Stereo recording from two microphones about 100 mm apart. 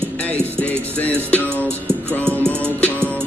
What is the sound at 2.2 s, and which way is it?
Music, 20° right (ahead or behind).